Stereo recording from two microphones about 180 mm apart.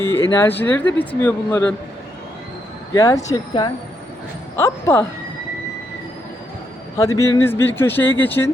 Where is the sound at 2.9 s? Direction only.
20° left (ahead or behind).